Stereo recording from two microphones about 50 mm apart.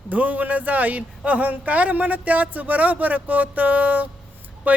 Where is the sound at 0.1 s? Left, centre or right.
Right.